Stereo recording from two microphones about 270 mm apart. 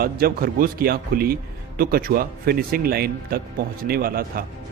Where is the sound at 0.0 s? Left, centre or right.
Right.